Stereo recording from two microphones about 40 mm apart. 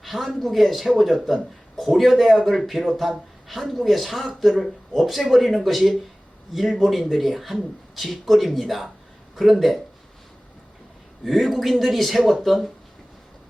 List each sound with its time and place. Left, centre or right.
0.0 s a man's voice: centre
11.2 s a man's voice: centre